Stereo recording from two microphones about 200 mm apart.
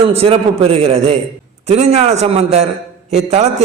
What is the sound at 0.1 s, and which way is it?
A man's voice, 30° right (ahead or behind).